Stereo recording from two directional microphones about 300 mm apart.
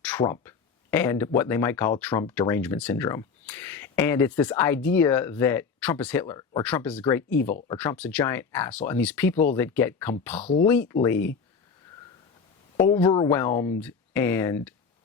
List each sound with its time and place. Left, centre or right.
0.0 s speech: centre
12.7 s speech: centre